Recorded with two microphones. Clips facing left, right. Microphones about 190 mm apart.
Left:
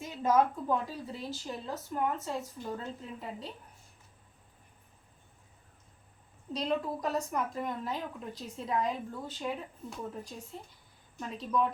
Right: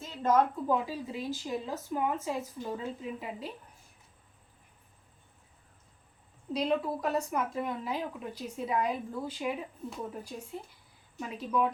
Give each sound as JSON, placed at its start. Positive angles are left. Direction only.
{"t": 0.0, "sound": "a sound", "side_deg": 10}
{"t": 0.7, "sound": "a woman's voice", "side_deg": -10}
{"t": 6.5, "sound": "a woman's voice", "side_deg": -5}